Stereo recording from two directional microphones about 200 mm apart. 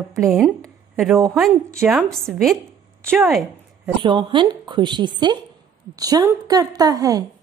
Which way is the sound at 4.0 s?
25° right (ahead or behind).